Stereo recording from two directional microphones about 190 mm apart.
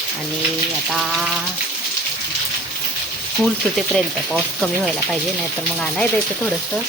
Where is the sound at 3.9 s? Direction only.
Centre (ahead or behind).